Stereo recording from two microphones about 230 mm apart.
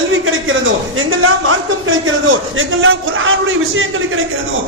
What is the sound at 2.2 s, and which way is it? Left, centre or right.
A man's voice, right.